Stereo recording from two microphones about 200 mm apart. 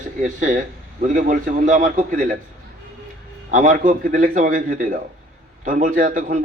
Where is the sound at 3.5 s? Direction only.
40° right (ahead or behind).